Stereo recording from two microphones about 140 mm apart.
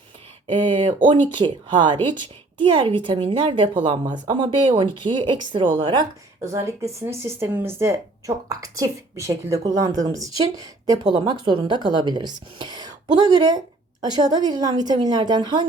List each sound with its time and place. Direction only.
0.4 s a woman's voice: 35° right (ahead or behind)